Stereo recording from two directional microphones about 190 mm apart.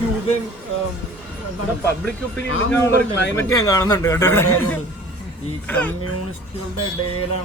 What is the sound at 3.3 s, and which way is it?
A man's voice, 15° left (ahead or behind).